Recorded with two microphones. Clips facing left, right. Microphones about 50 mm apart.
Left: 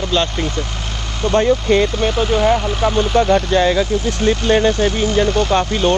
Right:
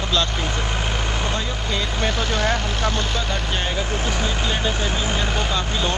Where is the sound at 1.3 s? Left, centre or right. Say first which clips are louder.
Left 12 dB; left.